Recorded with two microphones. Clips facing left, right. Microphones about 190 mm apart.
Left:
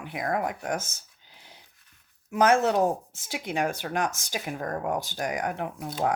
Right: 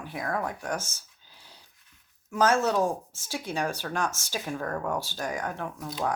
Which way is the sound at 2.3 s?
20° left (ahead or behind).